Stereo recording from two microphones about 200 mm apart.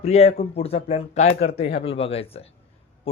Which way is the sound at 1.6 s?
60° left (ahead or behind).